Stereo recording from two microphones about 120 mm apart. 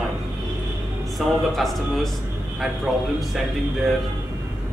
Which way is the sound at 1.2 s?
Centre (ahead or behind).